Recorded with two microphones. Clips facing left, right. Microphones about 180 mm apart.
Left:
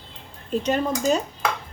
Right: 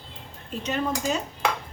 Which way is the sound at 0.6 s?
35° left (ahead or behind).